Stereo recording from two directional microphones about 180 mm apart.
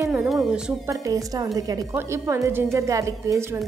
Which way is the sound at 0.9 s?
20° right (ahead or behind).